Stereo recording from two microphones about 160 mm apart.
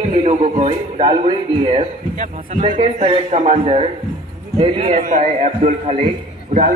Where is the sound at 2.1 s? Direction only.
50° right (ahead or behind).